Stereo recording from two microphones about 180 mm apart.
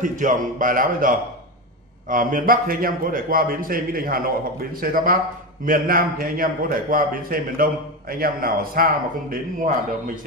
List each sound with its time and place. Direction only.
0.0 s a man's voice: 45° right (ahead or behind)